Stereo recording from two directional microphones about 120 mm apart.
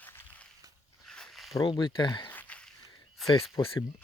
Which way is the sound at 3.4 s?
50° left (ahead or behind).